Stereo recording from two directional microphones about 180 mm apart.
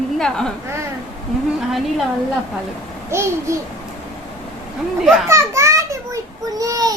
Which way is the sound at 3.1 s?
15° right (ahead or behind).